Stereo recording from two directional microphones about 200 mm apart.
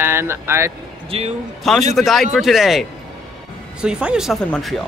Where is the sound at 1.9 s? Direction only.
Centre (ahead or behind).